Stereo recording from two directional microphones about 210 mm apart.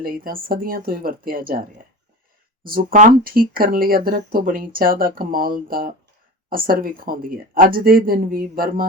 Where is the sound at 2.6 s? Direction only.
45° right (ahead or behind).